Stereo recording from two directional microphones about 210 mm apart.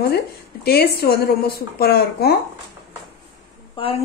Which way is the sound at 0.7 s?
45° left (ahead or behind).